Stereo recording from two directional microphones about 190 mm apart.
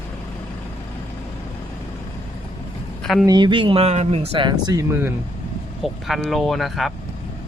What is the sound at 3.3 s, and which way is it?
Speech, 25° right (ahead or behind).